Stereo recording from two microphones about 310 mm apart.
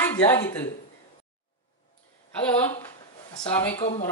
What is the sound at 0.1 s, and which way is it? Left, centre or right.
Speech, centre.